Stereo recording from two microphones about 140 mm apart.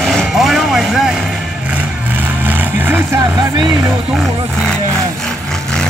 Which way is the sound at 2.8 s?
15° right (ahead or behind).